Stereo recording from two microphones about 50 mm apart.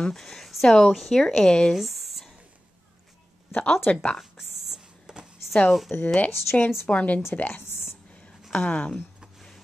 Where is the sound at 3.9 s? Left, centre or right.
Left.